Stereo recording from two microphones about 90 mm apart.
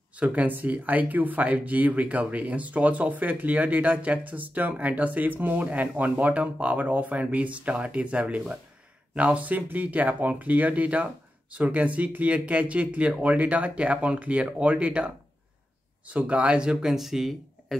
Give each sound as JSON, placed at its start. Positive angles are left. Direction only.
{"t": 0.1, "sound": "speech", "side_deg": -15}
{"t": 16.1, "sound": "speech", "side_deg": -15}